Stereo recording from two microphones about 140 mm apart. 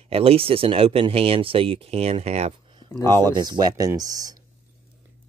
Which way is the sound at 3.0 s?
30° right (ahead or behind).